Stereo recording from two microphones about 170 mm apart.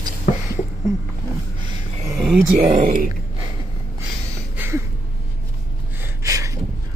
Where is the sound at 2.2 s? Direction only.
5° right (ahead or behind).